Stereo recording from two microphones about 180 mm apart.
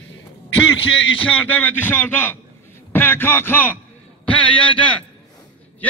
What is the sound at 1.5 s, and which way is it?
A man's voice, 10° left (ahead or behind).